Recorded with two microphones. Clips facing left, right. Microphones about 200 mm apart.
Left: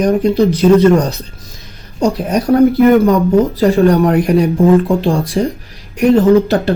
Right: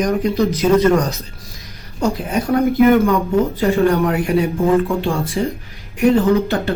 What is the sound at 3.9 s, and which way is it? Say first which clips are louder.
Speech: left 5 dB; 35° left (ahead or behind).